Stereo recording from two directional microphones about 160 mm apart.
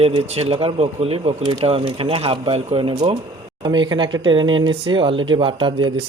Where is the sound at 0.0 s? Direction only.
40° right (ahead or behind).